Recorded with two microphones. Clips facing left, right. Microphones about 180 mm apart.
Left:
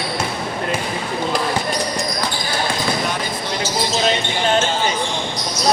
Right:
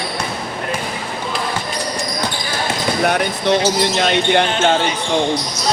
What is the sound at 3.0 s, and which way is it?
Speech, 65° right (ahead or behind).